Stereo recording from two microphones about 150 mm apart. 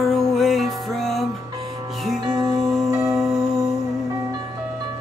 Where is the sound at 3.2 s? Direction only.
5° right (ahead or behind).